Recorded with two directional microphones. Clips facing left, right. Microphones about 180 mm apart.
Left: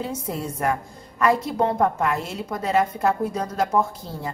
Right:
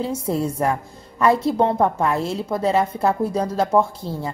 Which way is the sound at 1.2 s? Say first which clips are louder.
Right 3 dB; 30° right (ahead or behind).